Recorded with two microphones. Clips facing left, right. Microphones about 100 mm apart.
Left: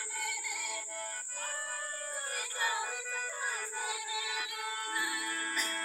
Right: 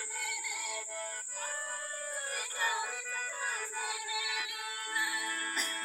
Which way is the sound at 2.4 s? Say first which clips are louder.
Even; 10° left (ahead or behind).